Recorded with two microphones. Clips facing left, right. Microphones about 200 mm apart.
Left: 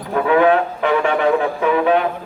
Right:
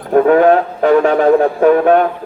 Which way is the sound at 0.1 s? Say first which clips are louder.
Right 5 dB; 45° right (ahead or behind).